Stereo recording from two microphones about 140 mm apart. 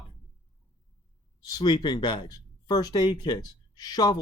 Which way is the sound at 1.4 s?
30° left (ahead or behind).